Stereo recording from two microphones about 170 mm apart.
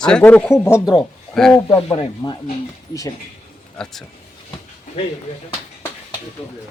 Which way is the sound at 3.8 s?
Centre (ahead or behind).